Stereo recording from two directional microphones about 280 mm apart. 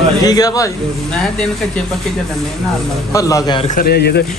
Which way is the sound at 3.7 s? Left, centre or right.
Left.